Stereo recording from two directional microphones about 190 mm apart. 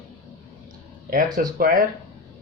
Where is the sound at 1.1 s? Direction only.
50° right (ahead or behind).